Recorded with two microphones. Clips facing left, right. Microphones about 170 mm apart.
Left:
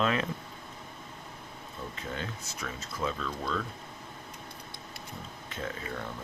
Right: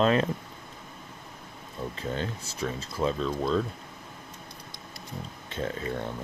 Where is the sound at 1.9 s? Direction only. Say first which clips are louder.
Right 6 dB; 30° right (ahead or behind).